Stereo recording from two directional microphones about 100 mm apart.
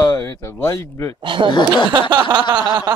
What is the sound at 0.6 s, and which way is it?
Speech, 30° left (ahead or behind).